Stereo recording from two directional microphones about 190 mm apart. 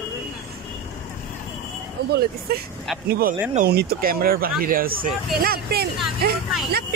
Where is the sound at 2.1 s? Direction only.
55° right (ahead or behind).